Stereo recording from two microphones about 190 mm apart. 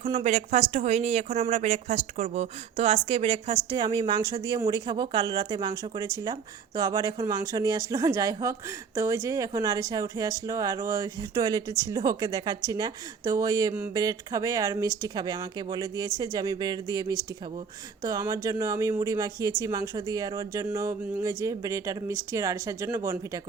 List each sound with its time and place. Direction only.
0.0 s speech: 35° right (ahead or behind); by 23.4 s 15° right (ahead or behind)